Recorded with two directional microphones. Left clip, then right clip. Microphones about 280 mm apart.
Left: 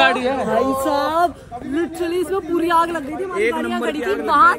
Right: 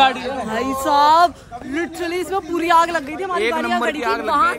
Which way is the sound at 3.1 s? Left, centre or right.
Right.